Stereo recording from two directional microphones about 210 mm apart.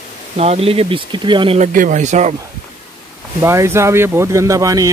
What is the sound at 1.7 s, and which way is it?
Speech, 40° right (ahead or behind).